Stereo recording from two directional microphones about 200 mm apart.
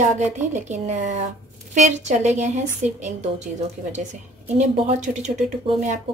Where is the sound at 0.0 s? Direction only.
35° right (ahead or behind).